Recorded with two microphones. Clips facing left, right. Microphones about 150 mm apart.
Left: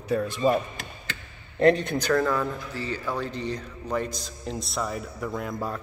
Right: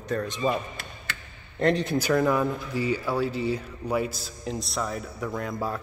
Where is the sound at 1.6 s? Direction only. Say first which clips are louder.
Left 3 dB; centre (ahead or behind).